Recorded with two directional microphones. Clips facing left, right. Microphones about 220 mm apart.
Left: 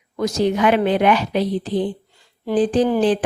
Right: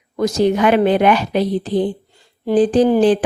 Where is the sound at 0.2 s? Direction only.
45° right (ahead or behind).